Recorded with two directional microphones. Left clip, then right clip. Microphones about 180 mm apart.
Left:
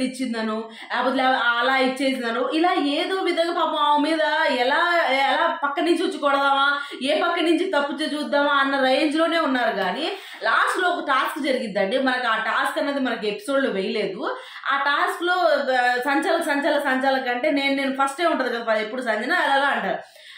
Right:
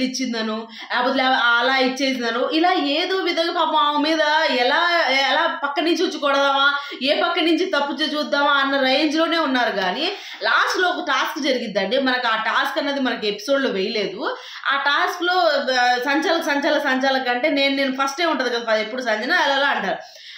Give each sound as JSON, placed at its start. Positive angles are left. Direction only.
{"t": 0.9, "sound": "a woman's voice", "side_deg": -20}